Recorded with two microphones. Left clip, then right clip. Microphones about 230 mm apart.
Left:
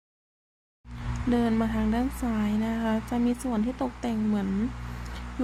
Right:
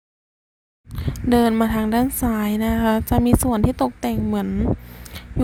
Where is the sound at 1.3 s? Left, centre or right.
Right.